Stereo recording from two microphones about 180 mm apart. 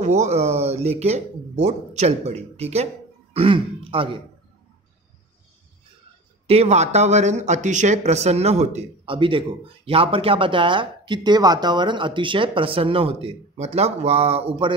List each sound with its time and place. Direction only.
0.0 s speech: 40° right (ahead or behind)
6.4 s speech: 35° right (ahead or behind)